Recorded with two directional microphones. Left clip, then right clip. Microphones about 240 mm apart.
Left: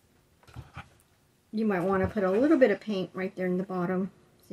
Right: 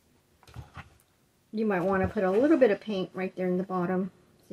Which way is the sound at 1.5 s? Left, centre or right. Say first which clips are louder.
Right 1 dB; left.